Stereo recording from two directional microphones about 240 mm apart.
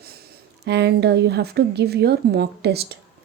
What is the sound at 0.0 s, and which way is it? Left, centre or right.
A woman's voice, right.